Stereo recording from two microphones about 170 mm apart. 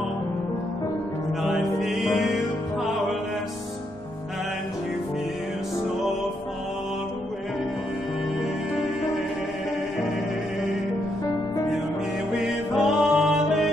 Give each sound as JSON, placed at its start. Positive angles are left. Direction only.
{"t": 1.4, "sound": "music", "side_deg": 0}
{"t": 12.7, "sound": "music", "side_deg": -5}